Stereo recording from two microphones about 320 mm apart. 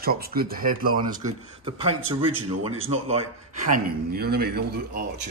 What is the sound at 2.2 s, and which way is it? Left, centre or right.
Speech, centre.